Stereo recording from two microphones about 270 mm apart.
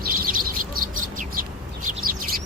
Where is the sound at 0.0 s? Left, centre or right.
Right.